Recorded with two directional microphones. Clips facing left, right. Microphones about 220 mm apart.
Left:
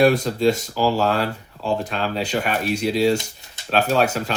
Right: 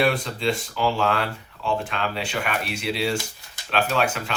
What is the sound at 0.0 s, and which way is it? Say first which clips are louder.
Speech: left 6 dB; 40° left (ahead or behind).